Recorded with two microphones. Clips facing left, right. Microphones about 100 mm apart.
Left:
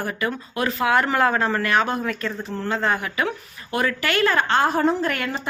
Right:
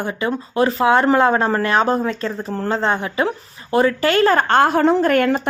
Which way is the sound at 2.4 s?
40° right (ahead or behind).